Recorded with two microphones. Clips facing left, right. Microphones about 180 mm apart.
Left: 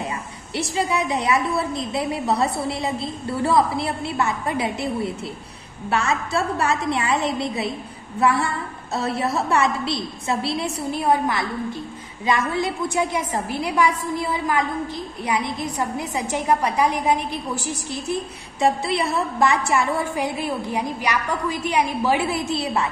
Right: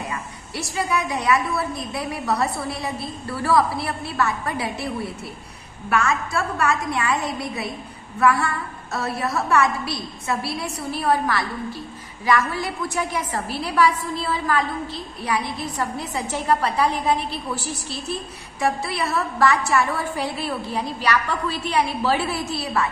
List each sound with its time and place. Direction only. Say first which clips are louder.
0.1 s a woman's voice: left 2 dB; 20° left (ahead or behind)